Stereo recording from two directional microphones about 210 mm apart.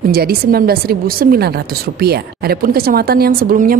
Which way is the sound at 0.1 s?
45° right (ahead or behind).